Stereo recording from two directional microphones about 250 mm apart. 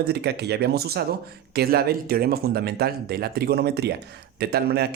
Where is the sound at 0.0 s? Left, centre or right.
Right.